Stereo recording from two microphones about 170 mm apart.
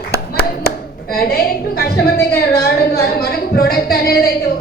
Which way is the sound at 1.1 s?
60° left (ahead or behind).